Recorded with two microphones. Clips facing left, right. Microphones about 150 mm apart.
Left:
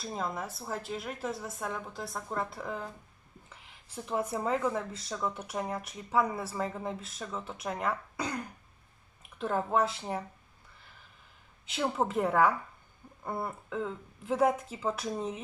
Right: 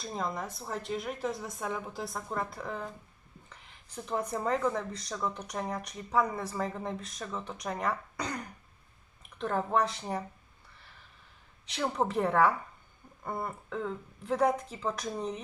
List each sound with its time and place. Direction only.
0.0 s speech: 5° left (ahead or behind)
9.4 s speech: 5° left (ahead or behind)
11.6 s speech: 5° left (ahead or behind)